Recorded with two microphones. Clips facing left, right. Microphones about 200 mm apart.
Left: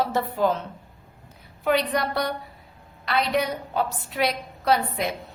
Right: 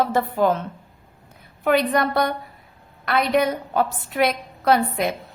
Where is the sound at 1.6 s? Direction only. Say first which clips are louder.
Right 4 dB; 55° right (ahead or behind).